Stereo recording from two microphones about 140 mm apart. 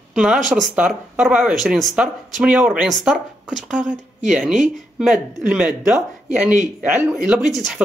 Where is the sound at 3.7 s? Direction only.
65° right (ahead or behind).